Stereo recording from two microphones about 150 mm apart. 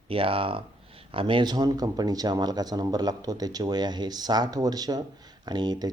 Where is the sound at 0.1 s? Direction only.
35° right (ahead or behind).